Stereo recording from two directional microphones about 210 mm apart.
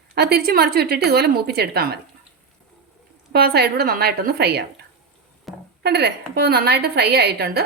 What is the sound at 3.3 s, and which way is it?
A woman's voice, 50° right (ahead or behind).